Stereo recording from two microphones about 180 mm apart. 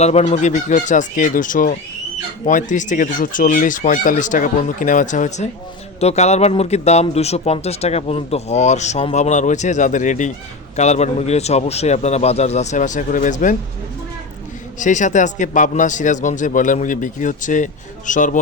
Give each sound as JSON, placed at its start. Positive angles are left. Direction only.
{"t": 0.0, "sound": "a man's voice", "side_deg": 35}
{"t": 14.8, "sound": "a man's voice", "side_deg": 45}